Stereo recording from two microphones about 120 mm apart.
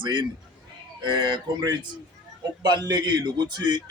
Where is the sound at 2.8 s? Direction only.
35° right (ahead or behind).